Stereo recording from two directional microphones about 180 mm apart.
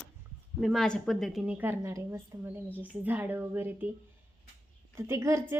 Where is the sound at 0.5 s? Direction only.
Centre (ahead or behind).